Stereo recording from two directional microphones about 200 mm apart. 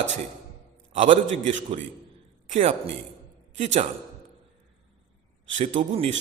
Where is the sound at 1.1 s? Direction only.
35° right (ahead or behind).